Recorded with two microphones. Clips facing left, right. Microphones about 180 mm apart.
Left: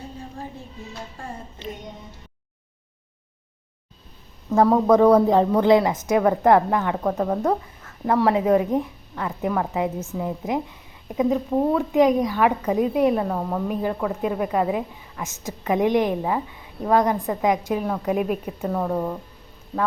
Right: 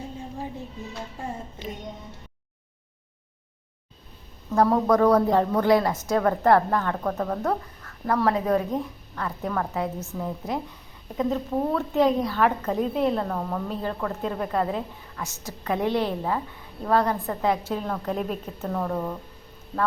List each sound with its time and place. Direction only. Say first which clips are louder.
4.5 s a woman's voice: left 4 dB; 20° left (ahead or behind)